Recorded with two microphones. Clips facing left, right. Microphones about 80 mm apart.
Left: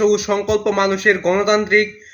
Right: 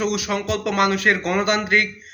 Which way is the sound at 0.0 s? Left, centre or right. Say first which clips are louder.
Left 8 dB; left.